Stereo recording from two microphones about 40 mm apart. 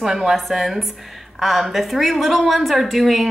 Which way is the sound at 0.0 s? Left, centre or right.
Centre.